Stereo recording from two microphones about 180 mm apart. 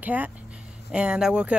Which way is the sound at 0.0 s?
10° right (ahead or behind).